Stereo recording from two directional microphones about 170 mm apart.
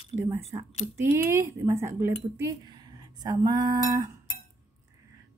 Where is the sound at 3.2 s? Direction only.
20° right (ahead or behind).